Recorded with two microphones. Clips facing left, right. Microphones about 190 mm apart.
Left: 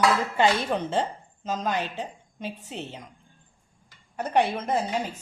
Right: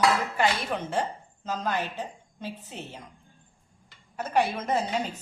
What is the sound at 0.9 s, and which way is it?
A woman's voice, 20° left (ahead or behind).